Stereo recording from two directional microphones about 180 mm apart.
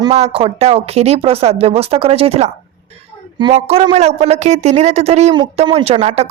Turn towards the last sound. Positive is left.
turn(degrees=-35)  # may be behind; listen again after turning